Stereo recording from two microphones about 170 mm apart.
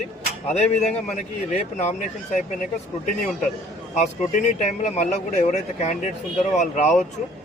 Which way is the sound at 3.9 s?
45° left (ahead or behind).